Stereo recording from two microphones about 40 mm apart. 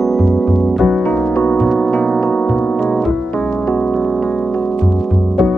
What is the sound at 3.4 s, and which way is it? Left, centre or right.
Music, left.